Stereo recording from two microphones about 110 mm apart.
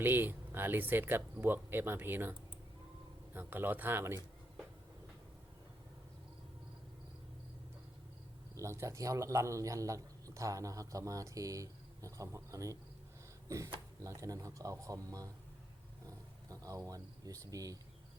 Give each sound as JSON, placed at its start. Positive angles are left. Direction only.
{"t": 0.0, "sound": "a man's voice", "side_deg": -20}
{"t": 3.3, "sound": "a man's voice", "side_deg": -20}
{"t": 8.5, "sound": "a man's voice", "side_deg": -25}
{"t": 14.0, "sound": "speech", "side_deg": -30}
{"t": 16.0, "sound": "roaring cats", "side_deg": -30}